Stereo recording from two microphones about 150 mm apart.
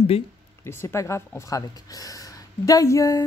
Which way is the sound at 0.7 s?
15° left (ahead or behind).